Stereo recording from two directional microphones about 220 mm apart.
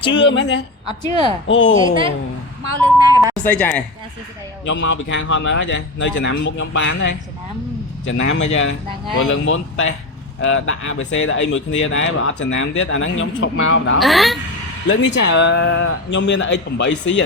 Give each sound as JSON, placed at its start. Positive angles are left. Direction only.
{"t": 0.1, "sound": "a woman's voice", "side_deg": 55}
{"t": 0.9, "sound": "a woman's voice", "side_deg": 20}
{"t": 1.5, "sound": "speech", "side_deg": 60}
{"t": 3.1, "sound": "a sound", "side_deg": -15}
{"t": 3.3, "sound": "speech", "side_deg": 5}
{"t": 4.7, "sound": "speech", "side_deg": 55}
{"t": 14.0, "sound": "a woman's voice", "side_deg": 0}
{"t": 14.8, "sound": "speech", "side_deg": 55}